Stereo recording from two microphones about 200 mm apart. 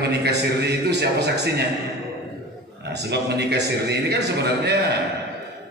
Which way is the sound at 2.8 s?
55° right (ahead or behind).